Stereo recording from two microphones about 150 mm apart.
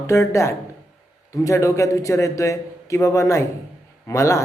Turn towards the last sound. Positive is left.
turn(degrees=20)  # may be behind; listen again after turning